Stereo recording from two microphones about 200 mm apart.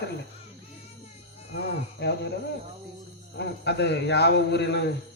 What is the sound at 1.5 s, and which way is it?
Speech, 60° left (ahead or behind).